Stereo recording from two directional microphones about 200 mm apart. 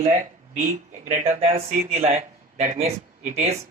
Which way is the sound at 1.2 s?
30° right (ahead or behind).